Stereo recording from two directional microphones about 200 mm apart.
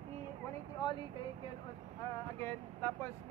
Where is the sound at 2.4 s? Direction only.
10° left (ahead or behind).